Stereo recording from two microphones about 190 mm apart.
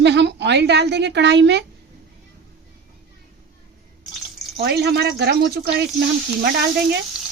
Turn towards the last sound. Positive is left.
turn(degrees=-55)  # may be behind; listen again after turning